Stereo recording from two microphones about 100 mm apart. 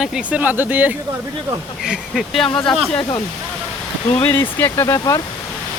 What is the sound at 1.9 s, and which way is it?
Speech, centre (ahead or behind).